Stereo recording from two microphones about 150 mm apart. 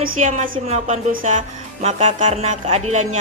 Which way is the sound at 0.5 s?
45° right (ahead or behind).